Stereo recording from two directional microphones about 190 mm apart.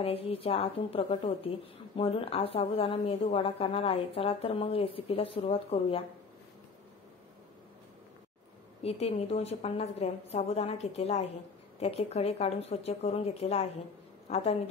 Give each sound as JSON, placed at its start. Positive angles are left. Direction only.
{"t": 0.0, "sound": "speech", "side_deg": 30}
{"t": 8.8, "sound": "a woman's voice", "side_deg": 35}